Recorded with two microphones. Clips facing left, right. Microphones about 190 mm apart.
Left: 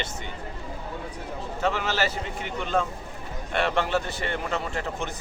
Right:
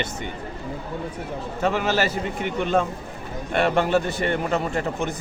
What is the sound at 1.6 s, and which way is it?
Speech, 50° right (ahead or behind).